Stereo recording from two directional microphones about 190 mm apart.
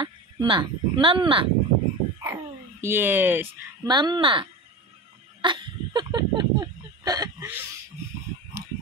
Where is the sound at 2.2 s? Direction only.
15° right (ahead or behind).